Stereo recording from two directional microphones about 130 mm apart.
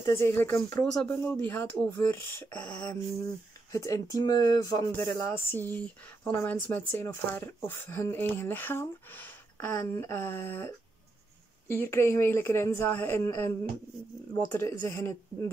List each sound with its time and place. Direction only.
0.2 s speech: 20° left (ahead or behind)
2.9 s speech: 25° left (ahead or behind)